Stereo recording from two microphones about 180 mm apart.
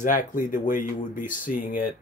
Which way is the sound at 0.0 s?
45° left (ahead or behind).